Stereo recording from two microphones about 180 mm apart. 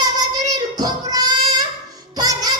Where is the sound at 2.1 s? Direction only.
20° right (ahead or behind).